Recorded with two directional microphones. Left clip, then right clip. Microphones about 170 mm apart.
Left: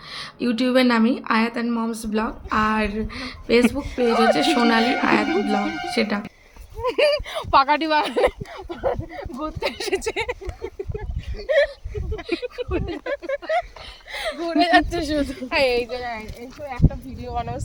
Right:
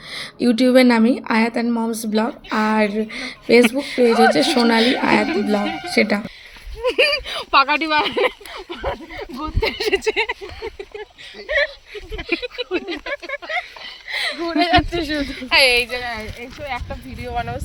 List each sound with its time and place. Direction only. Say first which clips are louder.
0.1 s a woman's voice: right 6 dB; 20° right (ahead or behind)
6.8 s speech: right 2 dB; 90° left
11.4 s speech: left 1 dB; 90° left
12.6 s speech: right 2 dB; 60° left (ahead or behind)
12.9 s speech: even; 75° left (ahead or behind)
14.6 s speech: right 1 dB; 55° left (ahead or behind)
15.9 s speech: right 3 dB; 25° left (ahead or behind)
16.6 s a woman's voice: right 1 dB; 25° right (ahead or behind)
17.2 s speech: right 3 dB; 40° right (ahead or behind)